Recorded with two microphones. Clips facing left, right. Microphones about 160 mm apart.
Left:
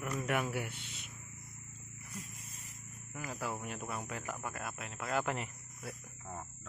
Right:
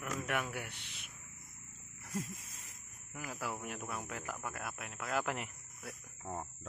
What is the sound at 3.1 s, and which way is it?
Speech, 5° right (ahead or behind).